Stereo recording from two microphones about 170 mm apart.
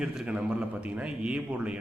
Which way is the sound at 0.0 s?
5° right (ahead or behind).